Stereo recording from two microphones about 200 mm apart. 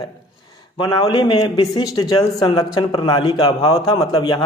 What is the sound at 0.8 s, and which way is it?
Speech, 20° left (ahead or behind).